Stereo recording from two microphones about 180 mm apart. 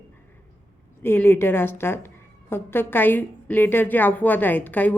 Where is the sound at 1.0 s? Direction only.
10° left (ahead or behind).